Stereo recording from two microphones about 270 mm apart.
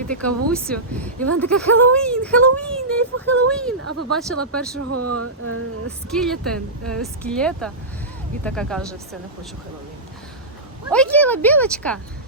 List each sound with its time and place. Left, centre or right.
0.1 s speech: centre
4.8 s a sound: right
6.1 s speech: centre
10.9 s speech: centre